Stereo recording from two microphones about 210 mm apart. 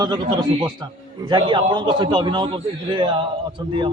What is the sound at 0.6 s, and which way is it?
A man's voice, 20° right (ahead or behind).